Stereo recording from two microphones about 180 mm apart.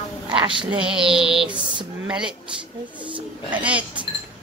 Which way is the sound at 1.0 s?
5° right (ahead or behind).